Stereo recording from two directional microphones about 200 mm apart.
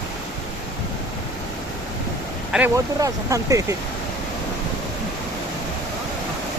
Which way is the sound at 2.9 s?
15° right (ahead or behind).